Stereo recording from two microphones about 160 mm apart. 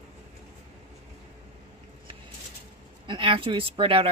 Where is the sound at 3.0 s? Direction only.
30° right (ahead or behind).